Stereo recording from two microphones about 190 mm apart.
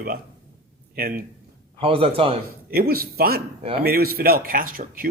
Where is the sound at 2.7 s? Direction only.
50° right (ahead or behind).